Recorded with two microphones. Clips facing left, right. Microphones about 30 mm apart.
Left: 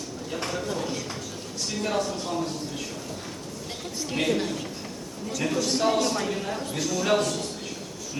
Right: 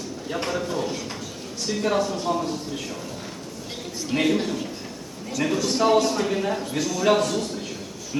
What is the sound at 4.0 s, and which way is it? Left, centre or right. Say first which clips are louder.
A man's voice: right 4 dB; centre.